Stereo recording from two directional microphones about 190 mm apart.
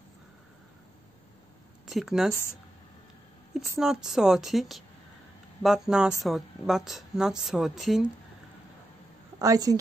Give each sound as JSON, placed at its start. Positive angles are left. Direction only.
{"t": 1.9, "sound": "speech", "side_deg": 0}
{"t": 3.8, "sound": "speech", "side_deg": 0}
{"t": 9.4, "sound": "a woman's voice", "side_deg": -20}